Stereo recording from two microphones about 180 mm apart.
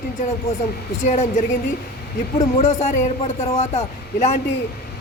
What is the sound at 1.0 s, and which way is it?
Speech, 40° left (ahead or behind).